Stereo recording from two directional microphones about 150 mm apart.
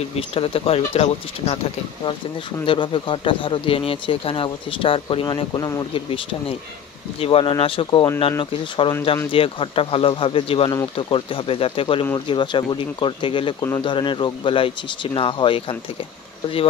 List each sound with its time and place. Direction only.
0.3 s speech: 40° left (ahead or behind)
2.6 s speech: 35° left (ahead or behind)